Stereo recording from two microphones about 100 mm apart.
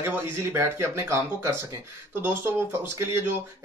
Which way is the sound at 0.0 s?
25° right (ahead or behind).